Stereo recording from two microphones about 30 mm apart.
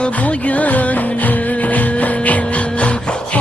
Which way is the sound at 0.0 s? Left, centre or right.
Left.